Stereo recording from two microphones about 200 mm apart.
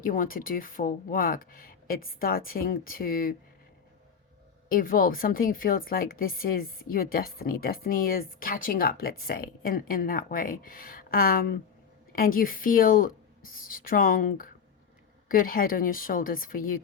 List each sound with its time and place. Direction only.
0.0 s a woman's voice: 45° left (ahead or behind)
4.7 s a woman's voice: 45° left (ahead or behind)